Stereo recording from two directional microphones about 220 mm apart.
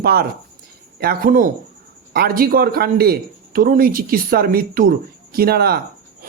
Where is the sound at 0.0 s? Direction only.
45° right (ahead or behind).